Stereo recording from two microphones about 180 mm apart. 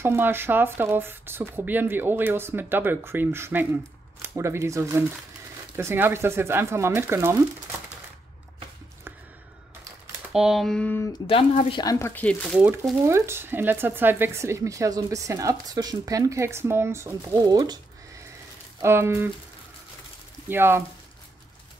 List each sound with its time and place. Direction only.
0.0 s speech: 10° right (ahead or behind)
10.3 s speech: centre (ahead or behind)
11.7 s speech: 20° left (ahead or behind)
12.5 s speech: 10° right (ahead or behind)
20.4 s speech: 10° right (ahead or behind)